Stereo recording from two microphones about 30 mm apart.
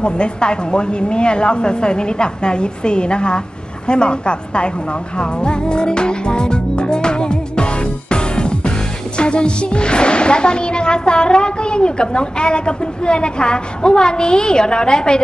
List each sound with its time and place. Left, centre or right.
0.0 s a woman's voice: left
5.1 s music: left